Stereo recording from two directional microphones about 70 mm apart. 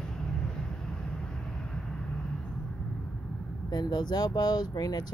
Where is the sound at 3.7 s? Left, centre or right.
Left.